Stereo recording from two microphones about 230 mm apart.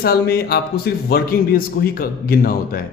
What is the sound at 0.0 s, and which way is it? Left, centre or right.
A man's voice, left.